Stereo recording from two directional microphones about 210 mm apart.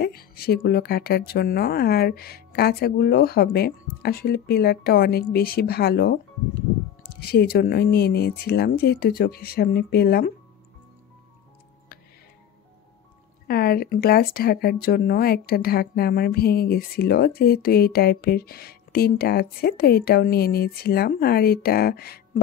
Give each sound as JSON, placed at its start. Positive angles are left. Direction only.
{"t": 0.0, "sound": "speech", "side_deg": 45}
{"t": 7.2, "sound": "speech", "side_deg": 50}
{"t": 13.5, "sound": "speech", "side_deg": 45}